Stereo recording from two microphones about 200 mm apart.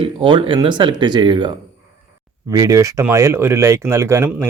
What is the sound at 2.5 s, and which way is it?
Speech, 15° right (ahead or behind).